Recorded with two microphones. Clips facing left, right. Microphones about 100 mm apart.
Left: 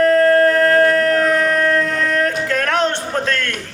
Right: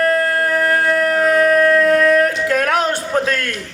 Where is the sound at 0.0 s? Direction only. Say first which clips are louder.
Left 5 dB; 5° right (ahead or behind).